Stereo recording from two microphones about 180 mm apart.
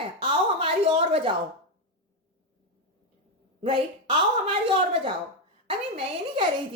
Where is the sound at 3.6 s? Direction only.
30° right (ahead or behind).